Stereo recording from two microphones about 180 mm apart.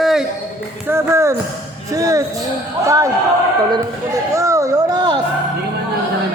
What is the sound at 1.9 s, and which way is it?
Speech, 20° right (ahead or behind).